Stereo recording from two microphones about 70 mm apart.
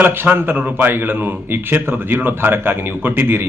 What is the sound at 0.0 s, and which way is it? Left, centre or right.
A man's voice, right.